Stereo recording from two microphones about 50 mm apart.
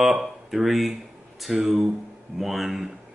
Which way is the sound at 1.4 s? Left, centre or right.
Centre.